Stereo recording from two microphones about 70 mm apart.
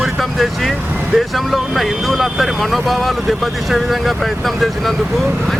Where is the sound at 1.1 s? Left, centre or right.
Centre.